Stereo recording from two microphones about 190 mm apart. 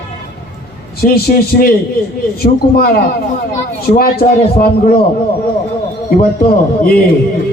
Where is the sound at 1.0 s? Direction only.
55° left (ahead or behind).